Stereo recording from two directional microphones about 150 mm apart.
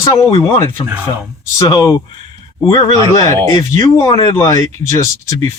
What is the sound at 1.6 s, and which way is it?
Speech, 25° left (ahead or behind).